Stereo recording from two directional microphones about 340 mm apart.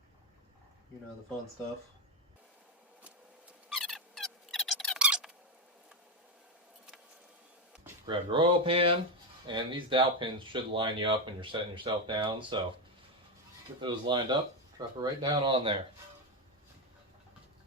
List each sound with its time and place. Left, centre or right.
3.7 s a sound: centre
8.0 s speech: centre
13.8 s speech: centre